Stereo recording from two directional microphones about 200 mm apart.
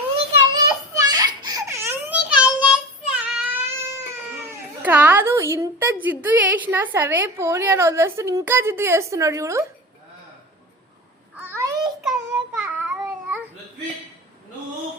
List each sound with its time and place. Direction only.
0.5 s a sound: 20° right (ahead or behind)
4.4 s a woman's voice: 10° right (ahead or behind)
11.3 s babbling: 10° right (ahead or behind)
12.0 s child singing: 5° right (ahead or behind)